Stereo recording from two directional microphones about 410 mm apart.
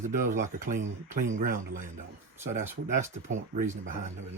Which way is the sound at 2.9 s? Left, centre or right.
Centre.